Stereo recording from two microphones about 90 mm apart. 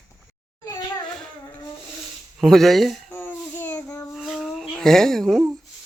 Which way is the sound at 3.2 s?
15° left (ahead or behind).